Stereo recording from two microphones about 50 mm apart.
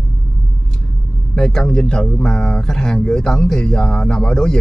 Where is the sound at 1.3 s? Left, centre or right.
Centre.